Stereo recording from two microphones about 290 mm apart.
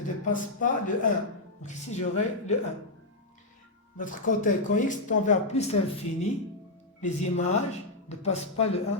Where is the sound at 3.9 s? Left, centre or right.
Left.